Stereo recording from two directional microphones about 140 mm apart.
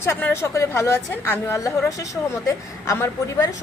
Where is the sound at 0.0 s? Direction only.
15° left (ahead or behind).